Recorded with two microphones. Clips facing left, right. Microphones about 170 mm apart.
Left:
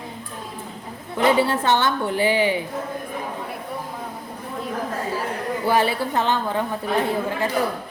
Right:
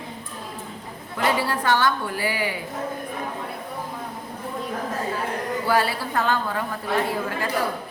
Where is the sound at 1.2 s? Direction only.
25° left (ahead or behind).